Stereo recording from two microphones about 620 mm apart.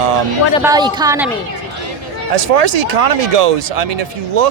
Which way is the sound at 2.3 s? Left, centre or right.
Right.